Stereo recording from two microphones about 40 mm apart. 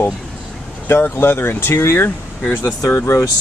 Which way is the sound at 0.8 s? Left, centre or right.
Left.